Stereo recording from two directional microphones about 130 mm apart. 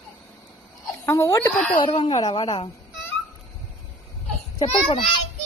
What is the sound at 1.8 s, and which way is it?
Speech, 45° left (ahead or behind).